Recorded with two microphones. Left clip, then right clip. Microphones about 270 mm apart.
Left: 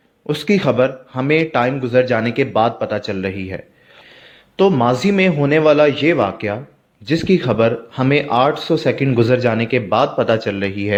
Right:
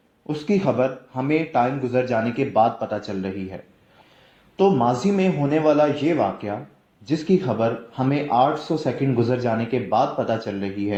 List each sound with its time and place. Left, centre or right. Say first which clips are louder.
0.3 s speech: left 6 dB; left